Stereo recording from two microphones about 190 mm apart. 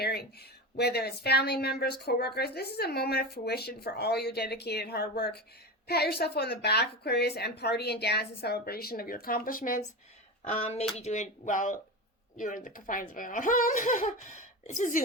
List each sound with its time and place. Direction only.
0.0 s a sound: 55° left (ahead or behind)
0.8 s a woman's voice: 55° left (ahead or behind)
10.5 s speech: 35° left (ahead or behind)